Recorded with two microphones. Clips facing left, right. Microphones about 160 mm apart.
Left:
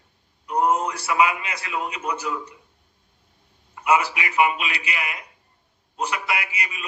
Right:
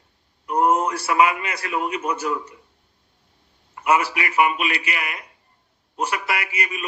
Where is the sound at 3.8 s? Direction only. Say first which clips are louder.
Right 1 dB; 50° right (ahead or behind).